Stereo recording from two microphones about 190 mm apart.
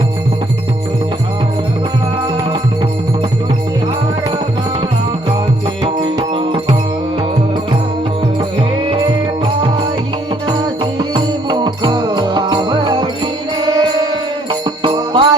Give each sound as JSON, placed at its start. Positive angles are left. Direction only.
{"t": 5.8, "sound": "music", "side_deg": -25}
{"t": 11.1, "sound": "music", "side_deg": -25}
{"t": 14.8, "sound": "jingle bell", "side_deg": -25}